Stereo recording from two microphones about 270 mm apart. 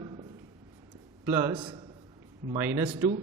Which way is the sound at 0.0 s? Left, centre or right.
Centre.